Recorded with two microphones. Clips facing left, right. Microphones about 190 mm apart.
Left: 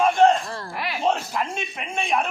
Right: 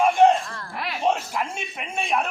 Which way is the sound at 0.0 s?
15° right (ahead or behind).